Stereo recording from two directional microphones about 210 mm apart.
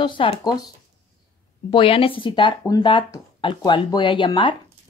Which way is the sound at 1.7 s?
25° left (ahead or behind).